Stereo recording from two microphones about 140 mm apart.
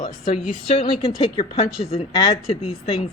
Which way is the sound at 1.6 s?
45° left (ahead or behind).